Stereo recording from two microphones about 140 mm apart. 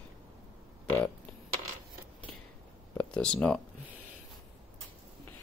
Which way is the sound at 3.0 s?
10° left (ahead or behind).